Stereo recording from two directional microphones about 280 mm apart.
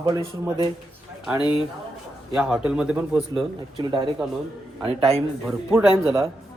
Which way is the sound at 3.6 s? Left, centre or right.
Centre.